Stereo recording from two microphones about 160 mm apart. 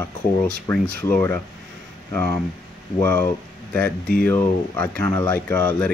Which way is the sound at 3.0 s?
15° left (ahead or behind).